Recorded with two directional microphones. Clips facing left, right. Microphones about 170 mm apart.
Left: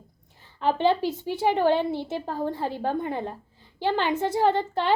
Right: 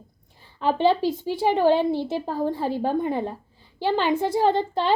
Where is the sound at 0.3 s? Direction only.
15° right (ahead or behind).